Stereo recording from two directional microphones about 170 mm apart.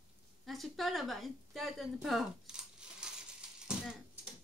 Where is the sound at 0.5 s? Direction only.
Centre (ahead or behind).